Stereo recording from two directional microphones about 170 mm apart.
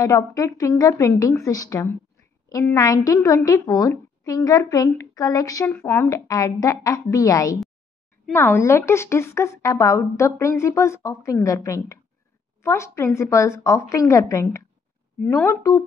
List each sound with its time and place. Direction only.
0.0 s a woman's voice: 20° left (ahead or behind)